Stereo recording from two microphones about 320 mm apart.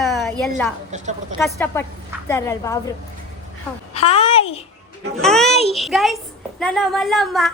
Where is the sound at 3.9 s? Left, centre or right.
Centre.